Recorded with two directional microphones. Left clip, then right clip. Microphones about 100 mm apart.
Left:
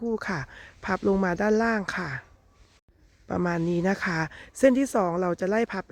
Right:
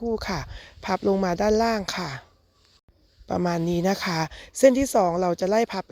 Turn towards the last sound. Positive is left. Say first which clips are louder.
# right 3 dB
turn(degrees=-15)  # may be behind; listen again after turning